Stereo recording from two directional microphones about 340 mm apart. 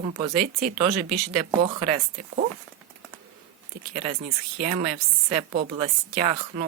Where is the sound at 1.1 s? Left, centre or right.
Centre.